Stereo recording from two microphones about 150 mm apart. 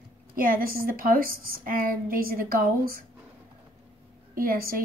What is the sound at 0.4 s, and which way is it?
A woman's voice, 70° right (ahead or behind).